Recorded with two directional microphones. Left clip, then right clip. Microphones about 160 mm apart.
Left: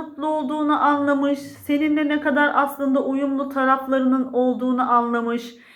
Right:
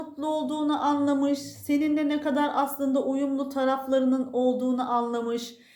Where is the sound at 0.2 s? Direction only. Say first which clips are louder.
Left 5 dB; 35° right (ahead or behind).